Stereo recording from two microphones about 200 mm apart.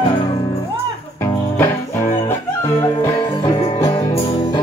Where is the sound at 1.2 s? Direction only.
10° left (ahead or behind).